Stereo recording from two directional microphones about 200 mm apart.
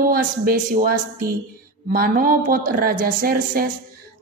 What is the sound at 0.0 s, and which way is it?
A woman's voice, 45° right (ahead or behind).